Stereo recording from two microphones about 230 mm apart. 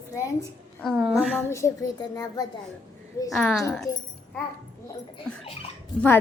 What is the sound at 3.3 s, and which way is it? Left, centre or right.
Speech, centre.